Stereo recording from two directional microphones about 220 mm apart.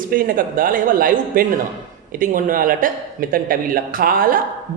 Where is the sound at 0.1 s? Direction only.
40° right (ahead or behind).